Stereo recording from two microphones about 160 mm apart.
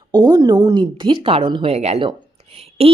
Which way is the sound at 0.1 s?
25° right (ahead or behind).